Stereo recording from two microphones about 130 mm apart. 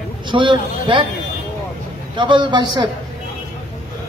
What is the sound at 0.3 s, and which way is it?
Speech, 40° right (ahead or behind).